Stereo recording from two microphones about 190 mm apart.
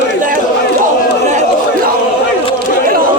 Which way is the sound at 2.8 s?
50° right (ahead or behind).